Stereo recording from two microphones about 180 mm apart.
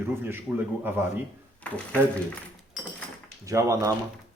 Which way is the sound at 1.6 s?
5° left (ahead or behind).